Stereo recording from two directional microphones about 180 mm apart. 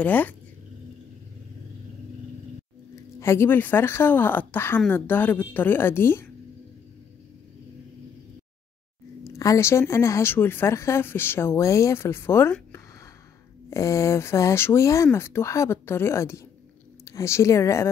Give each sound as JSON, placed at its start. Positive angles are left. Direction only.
{"t": 0.0, "sound": "speech", "side_deg": 10}
{"t": 3.2, "sound": "speech", "side_deg": 15}
{"t": 9.2, "sound": "a woman's voice", "side_deg": 15}